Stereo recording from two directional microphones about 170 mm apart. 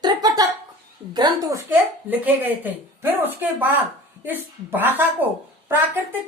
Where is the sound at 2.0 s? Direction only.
10° right (ahead or behind).